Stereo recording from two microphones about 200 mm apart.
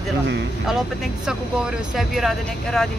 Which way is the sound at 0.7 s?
Centre (ahead or behind).